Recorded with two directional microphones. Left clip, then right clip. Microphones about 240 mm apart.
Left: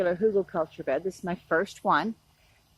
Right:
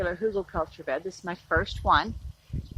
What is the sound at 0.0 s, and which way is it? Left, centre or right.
A man's voice, left.